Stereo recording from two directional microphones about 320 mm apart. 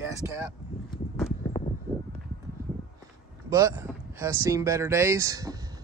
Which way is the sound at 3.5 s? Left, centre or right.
Centre.